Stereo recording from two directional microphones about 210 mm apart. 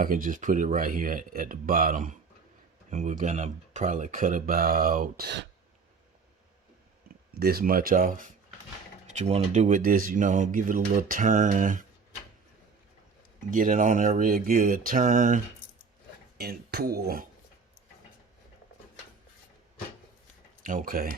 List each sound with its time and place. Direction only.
0.0 s speech: 40° right (ahead or behind)
7.3 s speech: 45° right (ahead or behind)
13.5 s speech: 40° right (ahead or behind)
16.4 s speech: 45° right (ahead or behind)
20.7 s speech: 40° right (ahead or behind)